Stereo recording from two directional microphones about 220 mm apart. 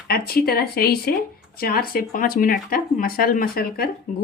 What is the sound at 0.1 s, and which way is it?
Speech, 45° left (ahead or behind).